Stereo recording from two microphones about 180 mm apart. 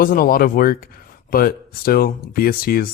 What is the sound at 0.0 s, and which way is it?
Speech, 50° left (ahead or behind).